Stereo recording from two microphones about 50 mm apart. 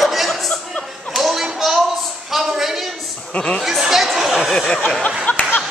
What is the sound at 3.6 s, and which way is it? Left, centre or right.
Chatter, centre.